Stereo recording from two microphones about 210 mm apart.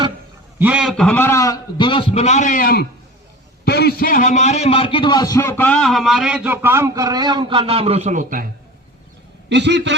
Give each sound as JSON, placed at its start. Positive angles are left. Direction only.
{"t": 0.6, "sound": "a man's voice", "side_deg": -5}
{"t": 9.5, "sound": "a man's voice", "side_deg": -55}